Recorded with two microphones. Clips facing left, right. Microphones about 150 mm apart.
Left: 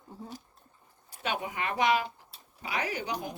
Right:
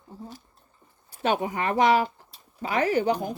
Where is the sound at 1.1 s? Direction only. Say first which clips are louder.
Right 8 dB; 40° right (ahead or behind).